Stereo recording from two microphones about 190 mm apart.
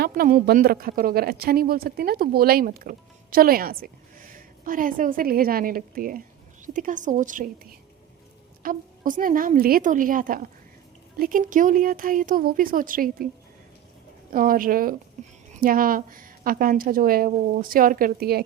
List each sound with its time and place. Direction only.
0.0 s a woman's voice: 45° right (ahead or behind)
14.3 s speech: 50° right (ahead or behind)